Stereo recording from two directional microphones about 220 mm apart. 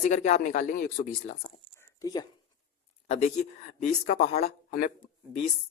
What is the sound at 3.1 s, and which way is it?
Speech, 30° left (ahead or behind).